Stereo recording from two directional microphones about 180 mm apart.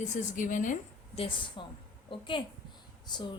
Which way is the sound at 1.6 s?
25° left (ahead or behind).